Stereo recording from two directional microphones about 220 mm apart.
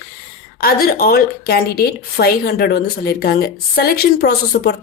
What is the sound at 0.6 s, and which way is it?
A woman's voice, 40° left (ahead or behind).